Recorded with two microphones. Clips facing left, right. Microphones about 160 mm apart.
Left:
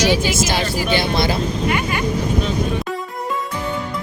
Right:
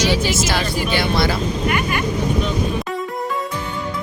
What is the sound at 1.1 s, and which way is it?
Speech, 20° left (ahead or behind).